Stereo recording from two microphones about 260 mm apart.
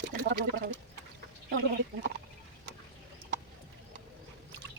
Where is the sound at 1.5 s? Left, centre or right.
Right.